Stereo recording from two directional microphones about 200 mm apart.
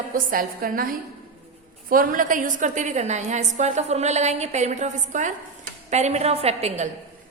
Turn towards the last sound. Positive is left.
turn(degrees=-30)  # may be behind; listen again after turning